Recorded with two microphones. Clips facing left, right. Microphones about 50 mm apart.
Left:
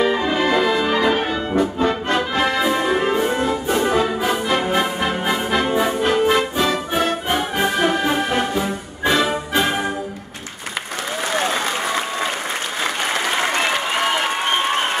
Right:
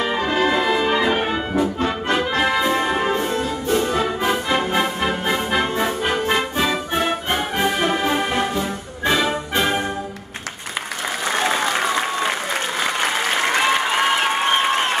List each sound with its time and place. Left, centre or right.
0.0 s brass instrument: centre
0.4 s music: centre
1.5 s brass instrument: centre
3.3 s music: centre
4.0 s music: centre